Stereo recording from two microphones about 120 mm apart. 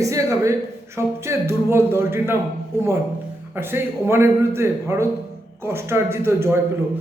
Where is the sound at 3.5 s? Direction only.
20° right (ahead or behind).